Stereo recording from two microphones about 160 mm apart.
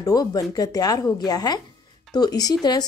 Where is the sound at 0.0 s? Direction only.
25° left (ahead or behind).